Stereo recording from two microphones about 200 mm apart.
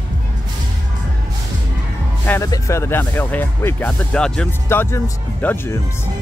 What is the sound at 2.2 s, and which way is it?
Speech, 15° left (ahead or behind).